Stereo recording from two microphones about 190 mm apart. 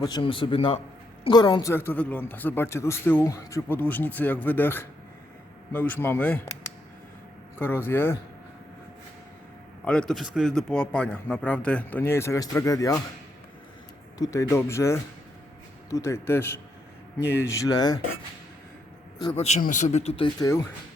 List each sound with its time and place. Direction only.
0.0 s a man's voice: 25° left (ahead or behind)
1.7 s speech: 10° left (ahead or behind)
7.6 s speech: 10° left (ahead or behind)
9.8 s speech: 5° left (ahead or behind)
14.2 s speech: 15° left (ahead or behind)
19.4 s speech: 35° left (ahead or behind)